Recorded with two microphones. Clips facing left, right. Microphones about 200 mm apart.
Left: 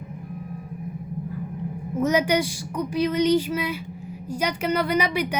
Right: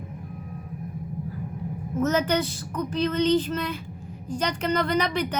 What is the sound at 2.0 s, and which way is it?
A woman's voice, 10° left (ahead or behind).